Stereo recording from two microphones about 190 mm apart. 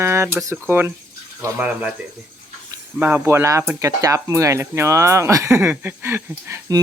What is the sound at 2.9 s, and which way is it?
Speech, 10° right (ahead or behind).